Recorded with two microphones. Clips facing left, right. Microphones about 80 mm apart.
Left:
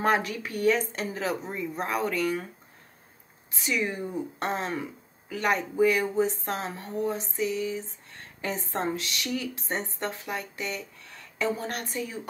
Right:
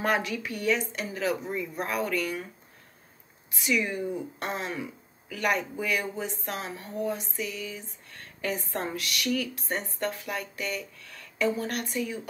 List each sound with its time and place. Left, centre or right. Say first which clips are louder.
0.0 s speech: left 2 dB; left
3.5 s speech: right 1 dB; left